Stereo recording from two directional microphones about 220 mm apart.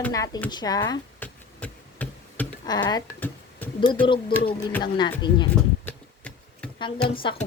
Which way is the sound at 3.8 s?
20° left (ahead or behind).